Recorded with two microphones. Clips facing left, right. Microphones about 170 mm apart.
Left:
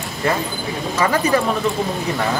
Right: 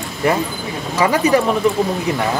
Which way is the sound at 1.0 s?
10° right (ahead or behind).